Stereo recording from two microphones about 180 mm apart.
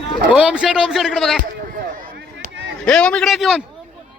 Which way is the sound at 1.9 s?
50° right (ahead or behind).